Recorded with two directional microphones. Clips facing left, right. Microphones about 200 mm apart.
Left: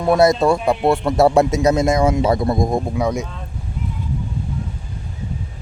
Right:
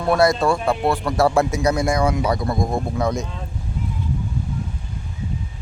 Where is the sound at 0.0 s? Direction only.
20° left (ahead or behind).